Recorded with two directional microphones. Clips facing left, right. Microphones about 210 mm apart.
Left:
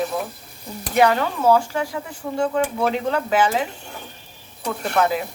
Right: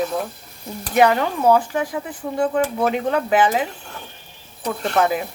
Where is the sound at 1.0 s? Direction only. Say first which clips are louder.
Right 1 dB; 20° right (ahead or behind).